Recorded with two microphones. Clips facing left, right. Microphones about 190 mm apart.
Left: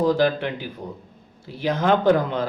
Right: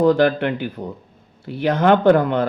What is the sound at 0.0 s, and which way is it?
Speech, 60° right (ahead or behind).